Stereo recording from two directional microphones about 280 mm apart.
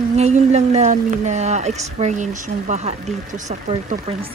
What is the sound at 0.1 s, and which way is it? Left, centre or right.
Speech, right.